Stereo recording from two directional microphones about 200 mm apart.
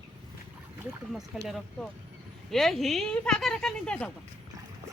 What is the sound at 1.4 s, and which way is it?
Speech, centre (ahead or behind).